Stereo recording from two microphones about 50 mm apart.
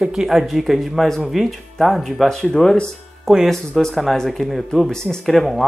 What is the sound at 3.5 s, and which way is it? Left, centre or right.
Speech, centre.